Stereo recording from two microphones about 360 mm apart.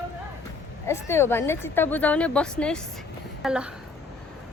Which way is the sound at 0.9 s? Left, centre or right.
Centre.